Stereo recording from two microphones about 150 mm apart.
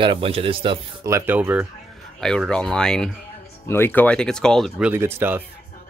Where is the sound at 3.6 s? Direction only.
15° left (ahead or behind); by 5.4 s 15° right (ahead or behind).